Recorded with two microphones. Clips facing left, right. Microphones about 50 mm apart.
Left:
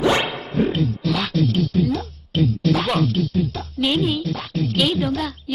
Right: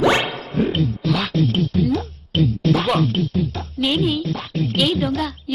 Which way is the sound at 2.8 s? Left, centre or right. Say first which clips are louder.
Right 1 dB; centre.